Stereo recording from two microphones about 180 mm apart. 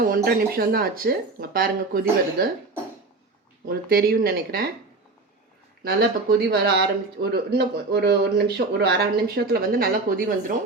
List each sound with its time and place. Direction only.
0.0 s speech: 55° right (ahead or behind)
3.7 s speech: 55° right (ahead or behind)
5.8 s speech: 60° right (ahead or behind)